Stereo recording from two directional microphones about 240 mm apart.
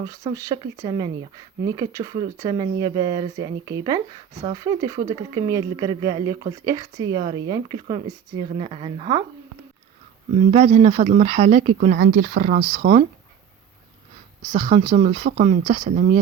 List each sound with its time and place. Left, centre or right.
0.0 s speech: centre
10.3 s speech: right
14.5 s speech: right